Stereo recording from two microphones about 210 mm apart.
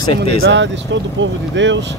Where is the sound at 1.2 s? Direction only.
60° right (ahead or behind).